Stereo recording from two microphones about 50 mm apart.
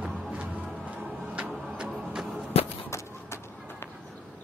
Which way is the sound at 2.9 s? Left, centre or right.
Left.